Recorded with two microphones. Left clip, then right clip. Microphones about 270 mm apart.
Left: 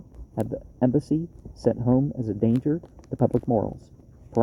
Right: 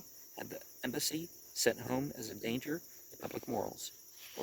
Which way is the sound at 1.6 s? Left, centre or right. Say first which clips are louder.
Left 11 dB; right.